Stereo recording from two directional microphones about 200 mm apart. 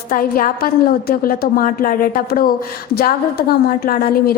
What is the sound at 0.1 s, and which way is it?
A woman's voice, 45° left (ahead or behind).